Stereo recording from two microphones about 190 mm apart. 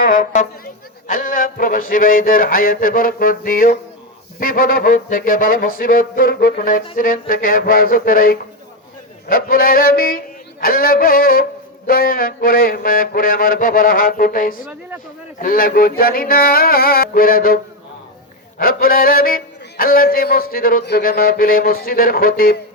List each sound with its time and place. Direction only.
0.2 s music: 45° left (ahead or behind)
18.6 s music: 50° left (ahead or behind)